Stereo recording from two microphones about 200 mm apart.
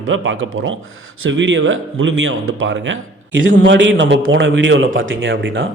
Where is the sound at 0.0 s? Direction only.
75° right (ahead or behind).